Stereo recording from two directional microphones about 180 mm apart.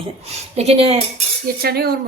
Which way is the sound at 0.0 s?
35° right (ahead or behind).